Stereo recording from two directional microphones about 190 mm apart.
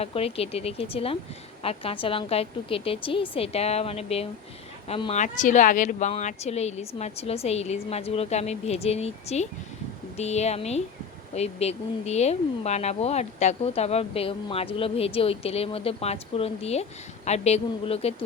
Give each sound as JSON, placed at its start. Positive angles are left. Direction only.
{"t": 0.0, "sound": "a woman's voice", "side_deg": 30}